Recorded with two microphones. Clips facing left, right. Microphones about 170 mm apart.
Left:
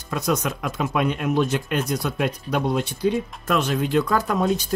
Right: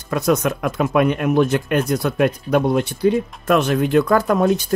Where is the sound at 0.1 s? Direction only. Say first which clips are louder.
Right 6 dB; 55° right (ahead or behind).